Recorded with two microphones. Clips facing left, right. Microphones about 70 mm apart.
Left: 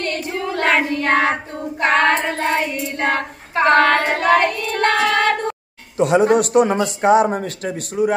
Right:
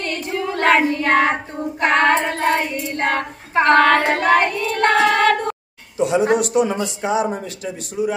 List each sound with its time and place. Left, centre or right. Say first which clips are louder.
0.0 s child singing: even; centre
4.6 s singing: right 1 dB; centre
4.9 s singing: right 3 dB; centre
5.9 s a man's voice: left 3 dB; left